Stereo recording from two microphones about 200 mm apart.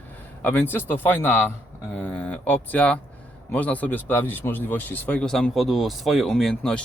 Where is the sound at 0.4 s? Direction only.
10° left (ahead or behind).